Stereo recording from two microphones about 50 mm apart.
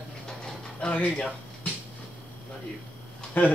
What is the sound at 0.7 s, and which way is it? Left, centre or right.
Speech, left.